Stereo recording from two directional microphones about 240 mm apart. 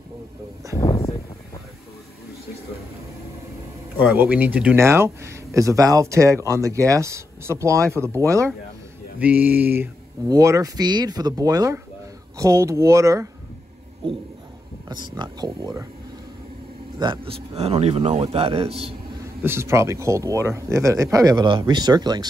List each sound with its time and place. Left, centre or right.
0.7 s a sound: centre
4.0 s speech: centre
9.2 s speech: centre
15.1 s speech: centre
17.0 s speech: right
19.4 s speech: centre